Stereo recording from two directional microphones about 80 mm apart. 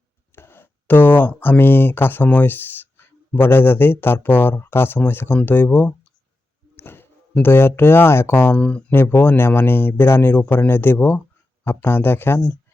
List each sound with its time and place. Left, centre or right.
0.3 s speech: left
6.7 s a sound: left
7.4 s speech: left